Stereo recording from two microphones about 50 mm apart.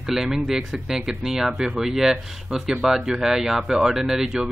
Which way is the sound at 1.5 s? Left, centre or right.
Centre.